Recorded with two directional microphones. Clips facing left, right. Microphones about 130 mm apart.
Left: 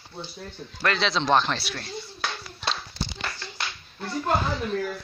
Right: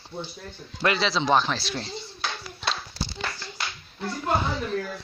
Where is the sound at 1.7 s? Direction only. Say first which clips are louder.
Right 2 dB; 20° right (ahead or behind).